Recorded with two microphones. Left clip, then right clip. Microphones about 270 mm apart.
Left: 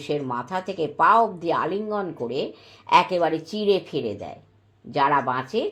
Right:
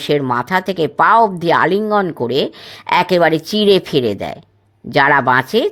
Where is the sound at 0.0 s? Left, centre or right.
Right.